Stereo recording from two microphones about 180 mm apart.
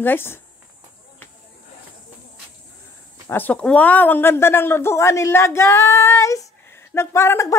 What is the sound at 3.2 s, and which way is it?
Speech, 10° left (ahead or behind).